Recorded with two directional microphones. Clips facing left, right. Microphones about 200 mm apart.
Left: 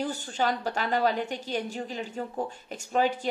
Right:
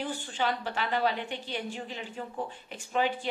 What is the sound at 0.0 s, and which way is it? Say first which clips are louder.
A woman's voice: left 3 dB; 40° left (ahead or behind).